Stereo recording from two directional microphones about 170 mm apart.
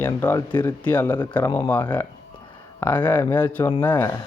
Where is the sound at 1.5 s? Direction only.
25° left (ahead or behind).